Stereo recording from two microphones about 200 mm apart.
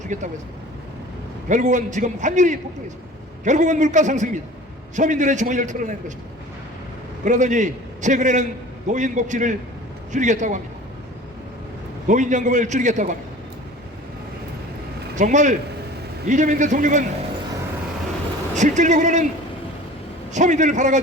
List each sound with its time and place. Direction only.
0.1 s a man's voice: 40° right (ahead or behind)
1.5 s a man's voice: 40° right (ahead or behind)
7.3 s a man's voice: 40° right (ahead or behind)
12.0 s a man's voice: 40° right (ahead or behind)
15.1 s a man's voice: 35° right (ahead or behind)
18.5 s a man's voice: 35° right (ahead or behind)
20.3 s a man's voice: 35° right (ahead or behind)